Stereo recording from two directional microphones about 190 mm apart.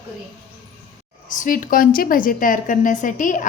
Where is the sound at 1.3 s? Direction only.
45° left (ahead or behind).